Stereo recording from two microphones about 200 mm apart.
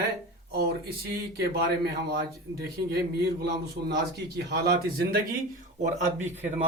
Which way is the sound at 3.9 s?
55° right (ahead or behind).